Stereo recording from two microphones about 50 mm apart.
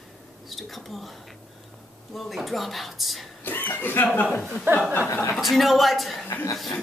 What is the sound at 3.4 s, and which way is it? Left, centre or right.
Speech, left.